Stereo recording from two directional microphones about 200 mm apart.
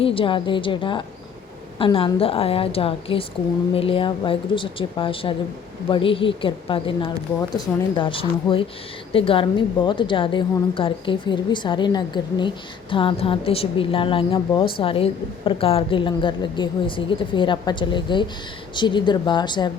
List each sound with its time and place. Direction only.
0.0 s a woman's voice: 25° left (ahead or behind)